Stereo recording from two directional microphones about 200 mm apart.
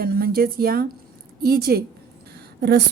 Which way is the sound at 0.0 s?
50° right (ahead or behind).